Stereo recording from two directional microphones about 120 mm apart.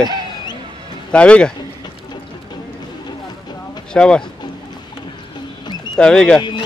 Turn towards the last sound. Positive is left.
turn(degrees=5)  # may be behind; listen again after turning